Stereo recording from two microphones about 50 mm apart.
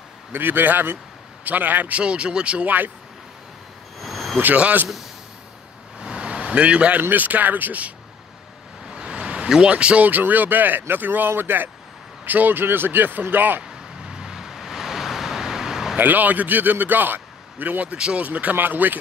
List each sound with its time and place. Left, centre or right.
0.3 s a man's voice: right
2.0 s speech: right
4.0 s a sound: centre
4.6 s speech: right
5.9 s vehicle: right
7.0 s a man's voice: right
8.9 s vehicle: centre
10.0 s a man's voice: right
13.6 s vehicle: centre
16.0 s a man's voice: right
17.9 s speech: centre
18.2 s a man's voice: right